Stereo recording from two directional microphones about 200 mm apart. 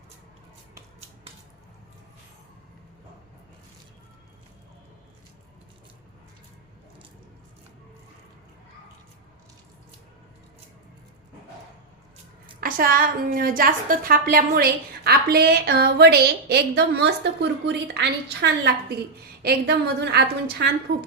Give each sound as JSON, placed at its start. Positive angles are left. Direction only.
{"t": 12.5, "sound": "a woman's voice", "side_deg": -45}